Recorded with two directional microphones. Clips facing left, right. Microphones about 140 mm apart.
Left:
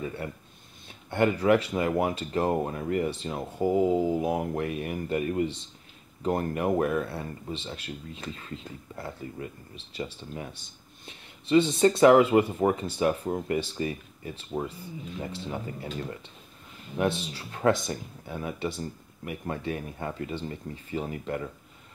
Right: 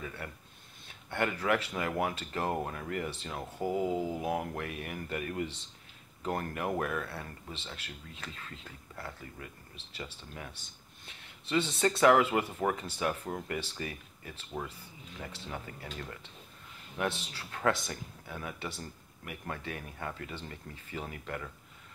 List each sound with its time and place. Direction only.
0.0 s speech: 25° left (ahead or behind)
11.1 s a sound: 15° left (ahead or behind)
11.8 s speech: 20° left (ahead or behind)